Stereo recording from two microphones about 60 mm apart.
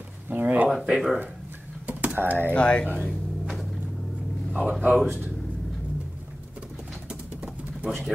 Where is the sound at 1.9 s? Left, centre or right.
Right.